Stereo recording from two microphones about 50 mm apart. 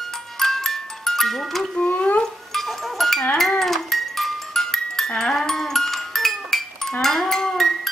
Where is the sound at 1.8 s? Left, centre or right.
Left.